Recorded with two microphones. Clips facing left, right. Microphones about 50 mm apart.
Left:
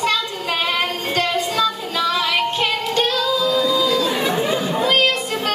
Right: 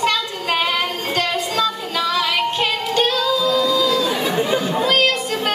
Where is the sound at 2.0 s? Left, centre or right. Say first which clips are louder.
Even; centre.